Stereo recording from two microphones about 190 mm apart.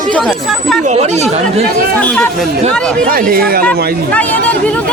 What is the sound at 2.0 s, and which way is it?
Speech, 5° left (ahead or behind).